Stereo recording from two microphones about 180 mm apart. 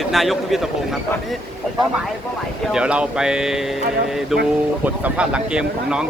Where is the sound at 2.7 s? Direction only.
5° right (ahead or behind).